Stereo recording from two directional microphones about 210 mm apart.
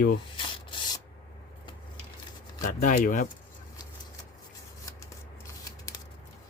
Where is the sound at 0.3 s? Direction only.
25° left (ahead or behind).